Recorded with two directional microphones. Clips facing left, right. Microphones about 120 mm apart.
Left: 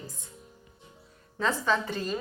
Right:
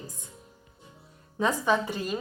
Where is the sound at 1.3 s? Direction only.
15° right (ahead or behind).